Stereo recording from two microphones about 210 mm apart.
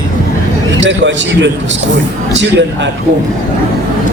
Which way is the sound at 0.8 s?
60° right (ahead or behind).